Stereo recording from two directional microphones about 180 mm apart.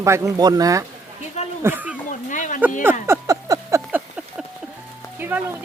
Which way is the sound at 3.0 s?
15° right (ahead or behind).